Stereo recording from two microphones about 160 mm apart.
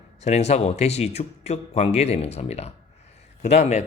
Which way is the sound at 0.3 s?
45° left (ahead or behind).